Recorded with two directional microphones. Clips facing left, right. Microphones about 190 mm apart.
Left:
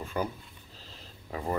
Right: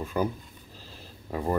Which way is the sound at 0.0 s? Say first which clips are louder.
Right 4 dB; 10° right (ahead or behind).